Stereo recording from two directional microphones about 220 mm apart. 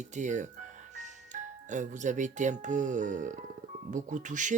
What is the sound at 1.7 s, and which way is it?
Speech, 35° right (ahead or behind).